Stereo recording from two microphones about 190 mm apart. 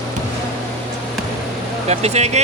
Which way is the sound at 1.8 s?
35° right (ahead or behind).